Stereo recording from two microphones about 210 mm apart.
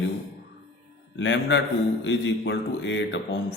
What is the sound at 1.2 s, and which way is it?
Speech, 60° left (ahead or behind).